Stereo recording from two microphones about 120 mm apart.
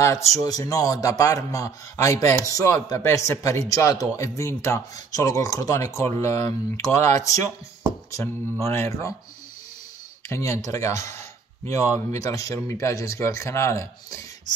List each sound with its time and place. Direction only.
0.0 s a man's voice: 25° left (ahead or behind)
10.2 s a man's voice: 25° left (ahead or behind)